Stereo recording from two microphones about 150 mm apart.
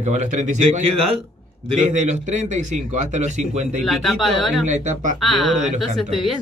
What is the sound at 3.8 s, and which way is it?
Speech, centre (ahead or behind).